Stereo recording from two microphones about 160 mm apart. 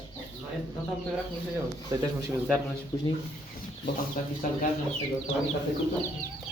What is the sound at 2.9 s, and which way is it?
Speech, 25° left (ahead or behind).